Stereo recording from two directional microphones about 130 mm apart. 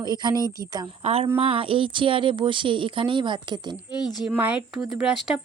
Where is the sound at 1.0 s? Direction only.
50° right (ahead or behind).